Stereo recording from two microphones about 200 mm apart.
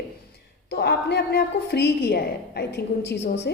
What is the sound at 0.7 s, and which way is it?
A woman's voice, 55° left (ahead or behind).